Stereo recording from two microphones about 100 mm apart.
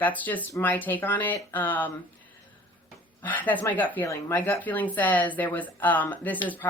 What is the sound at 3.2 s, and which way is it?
Speech, 15° left (ahead or behind).